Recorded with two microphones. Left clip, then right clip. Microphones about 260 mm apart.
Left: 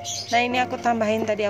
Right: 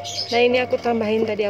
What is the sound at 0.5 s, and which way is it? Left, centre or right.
Speech, left.